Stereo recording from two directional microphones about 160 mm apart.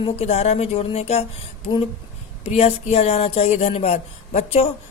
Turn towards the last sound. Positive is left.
turn(degrees=40)  # may be behind; listen again after turning